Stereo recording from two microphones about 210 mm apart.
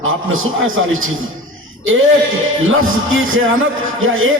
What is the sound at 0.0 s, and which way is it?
A man's voice, 70° right (ahead or behind).